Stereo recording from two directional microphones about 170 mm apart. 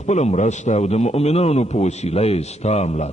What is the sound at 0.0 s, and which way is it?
A man's voice, 40° left (ahead or behind).